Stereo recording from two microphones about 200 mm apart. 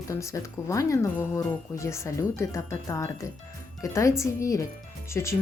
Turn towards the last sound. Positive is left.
turn(degrees=15)  # may be behind; listen again after turning